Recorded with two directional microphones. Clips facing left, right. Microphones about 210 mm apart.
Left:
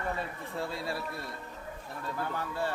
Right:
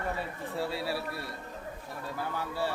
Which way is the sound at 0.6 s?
5° right (ahead or behind).